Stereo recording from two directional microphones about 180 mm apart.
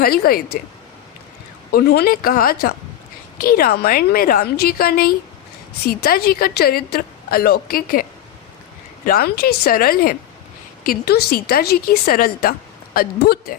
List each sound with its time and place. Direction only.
0.0 s a woman's voice: 55° left (ahead or behind)
1.7 s a woman's voice: 60° left (ahead or behind)
9.0 s a woman's voice: 60° left (ahead or behind)